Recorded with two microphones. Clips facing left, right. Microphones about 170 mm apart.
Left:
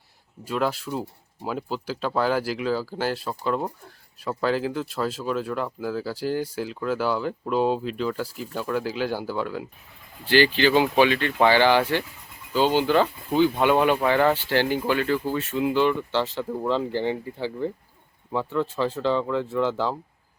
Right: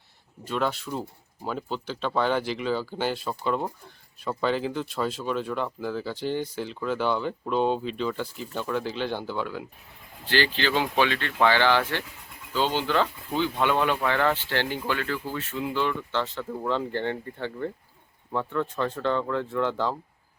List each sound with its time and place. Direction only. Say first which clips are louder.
0.4 s speech: left 2 dB; 5° left (ahead or behind)
10.2 s speech: left 6 dB; 10° left (ahead or behind)
14.9 s speech: left 6 dB; 25° left (ahead or behind)
16.9 s speech: left 3 dB; 5° left (ahead or behind)